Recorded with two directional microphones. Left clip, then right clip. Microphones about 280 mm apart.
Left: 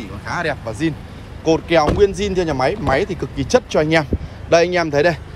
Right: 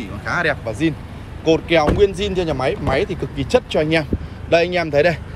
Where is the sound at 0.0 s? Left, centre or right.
Centre.